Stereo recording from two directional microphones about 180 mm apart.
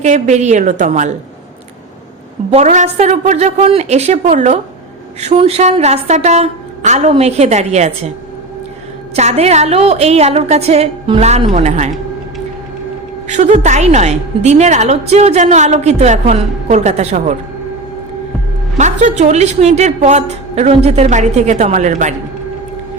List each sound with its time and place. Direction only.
0.0 s a woman's voice: 40° right (ahead or behind)
2.5 s a woman's voice: 40° right (ahead or behind)
9.1 s a woman's voice: 35° right (ahead or behind)
13.2 s a woman's voice: 40° right (ahead or behind)
18.8 s a woman's voice: 40° right (ahead or behind)